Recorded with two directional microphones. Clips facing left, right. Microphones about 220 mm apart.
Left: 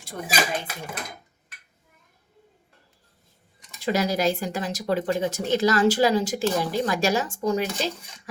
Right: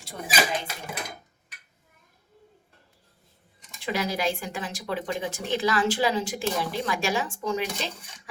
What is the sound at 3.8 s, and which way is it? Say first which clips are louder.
Speech: left 5 dB; 40° left (ahead or behind).